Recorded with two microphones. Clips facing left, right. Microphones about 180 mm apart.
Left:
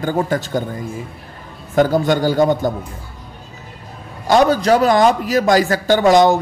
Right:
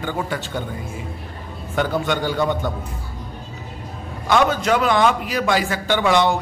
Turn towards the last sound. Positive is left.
turn(degrees=40)  # may be behind; listen again after turning